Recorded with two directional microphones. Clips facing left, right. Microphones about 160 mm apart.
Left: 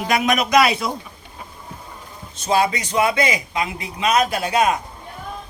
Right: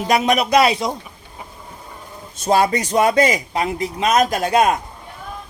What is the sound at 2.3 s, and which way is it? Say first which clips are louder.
A man's voice: right 3 dB; 45° right (ahead or behind).